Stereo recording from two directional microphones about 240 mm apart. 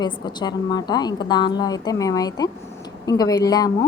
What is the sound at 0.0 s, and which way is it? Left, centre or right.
A woman's voice, centre.